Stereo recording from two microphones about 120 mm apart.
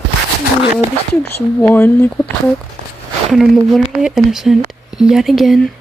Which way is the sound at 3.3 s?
Centre (ahead or behind).